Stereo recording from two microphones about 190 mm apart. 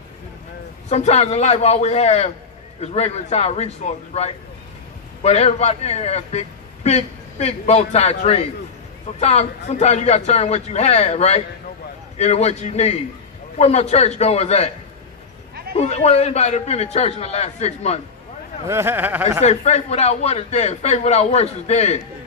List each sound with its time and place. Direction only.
0.9 s a man's voice: 35° left (ahead or behind)
15.8 s a man's voice: 35° left (ahead or behind)
18.7 s speech: 10° right (ahead or behind)
19.4 s a man's voice: 35° left (ahead or behind)